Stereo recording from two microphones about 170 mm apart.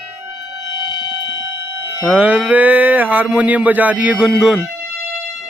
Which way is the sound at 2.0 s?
10° right (ahead or behind).